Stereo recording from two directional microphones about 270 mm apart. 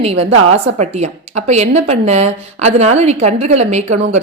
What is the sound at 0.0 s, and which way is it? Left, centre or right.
A woman's voice, right.